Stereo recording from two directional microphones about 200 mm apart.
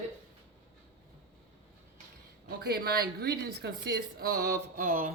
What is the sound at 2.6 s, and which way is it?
Speech, 50° right (ahead or behind).